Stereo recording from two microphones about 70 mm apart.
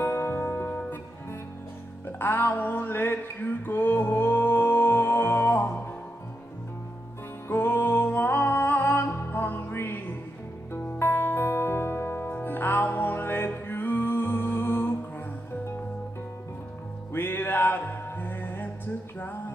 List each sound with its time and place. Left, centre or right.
0.0 s music: left
2.0 s music: left
7.4 s music: left
17.1 s music: left